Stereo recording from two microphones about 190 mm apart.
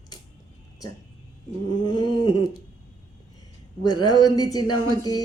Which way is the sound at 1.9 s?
25° left (ahead or behind).